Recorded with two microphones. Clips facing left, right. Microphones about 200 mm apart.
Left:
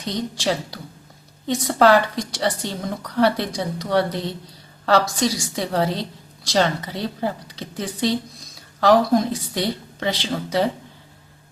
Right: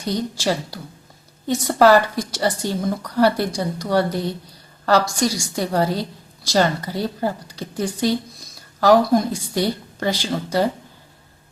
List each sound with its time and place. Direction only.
0.1 s a woman's voice: centre (ahead or behind)